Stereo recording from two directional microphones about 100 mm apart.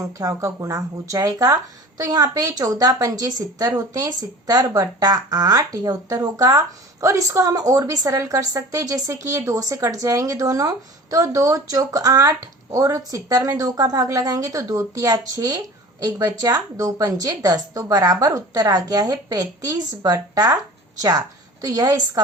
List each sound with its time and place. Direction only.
0.0 s a woman's voice: 35° right (ahead or behind)